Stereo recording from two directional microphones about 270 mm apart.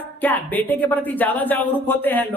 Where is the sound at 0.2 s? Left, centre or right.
Centre.